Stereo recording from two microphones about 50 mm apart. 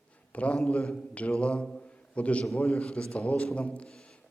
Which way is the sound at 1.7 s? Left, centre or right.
Left.